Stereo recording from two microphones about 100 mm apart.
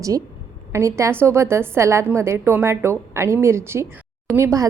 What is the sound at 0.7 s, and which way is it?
A woman's voice, 30° right (ahead or behind).